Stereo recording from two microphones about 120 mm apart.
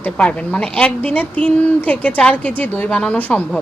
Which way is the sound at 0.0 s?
10° left (ahead or behind).